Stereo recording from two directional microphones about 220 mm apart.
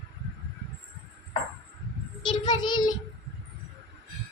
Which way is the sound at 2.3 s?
20° left (ahead or behind).